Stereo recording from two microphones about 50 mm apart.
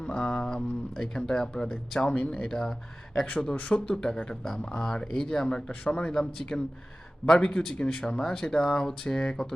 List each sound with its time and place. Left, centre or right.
0.0 s speech: centre
2.5 s speech: centre